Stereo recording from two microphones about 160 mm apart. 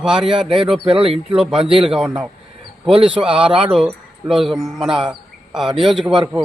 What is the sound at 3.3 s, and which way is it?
Speech, 35° right (ahead or behind).